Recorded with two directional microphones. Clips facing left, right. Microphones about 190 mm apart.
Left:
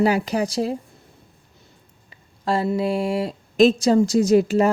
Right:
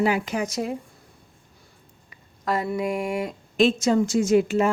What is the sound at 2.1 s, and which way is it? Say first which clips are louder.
Speech: left 3 dB; 30° left (ahead or behind).